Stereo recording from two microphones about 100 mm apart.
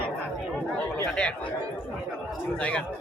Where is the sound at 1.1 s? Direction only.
10° left (ahead or behind).